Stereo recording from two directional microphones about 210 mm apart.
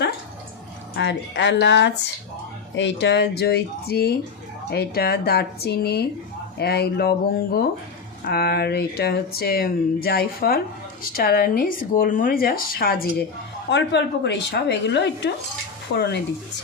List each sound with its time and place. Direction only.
0.9 s a woman's voice: 55° left (ahead or behind)
13.7 s a woman's voice: 55° left (ahead or behind)